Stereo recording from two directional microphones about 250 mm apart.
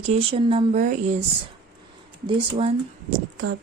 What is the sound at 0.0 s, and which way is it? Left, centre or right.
Speech, right.